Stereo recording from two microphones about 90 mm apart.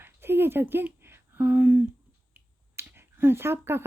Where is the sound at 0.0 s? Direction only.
25° right (ahead or behind).